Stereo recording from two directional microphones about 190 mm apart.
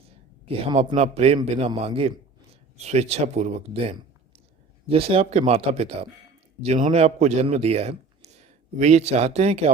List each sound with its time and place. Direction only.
0.5 s a man's voice: 30° right (ahead or behind)